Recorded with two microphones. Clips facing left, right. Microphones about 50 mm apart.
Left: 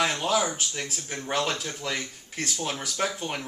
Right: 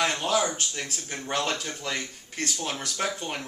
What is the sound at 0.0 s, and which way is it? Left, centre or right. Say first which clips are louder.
Speech: even; centre.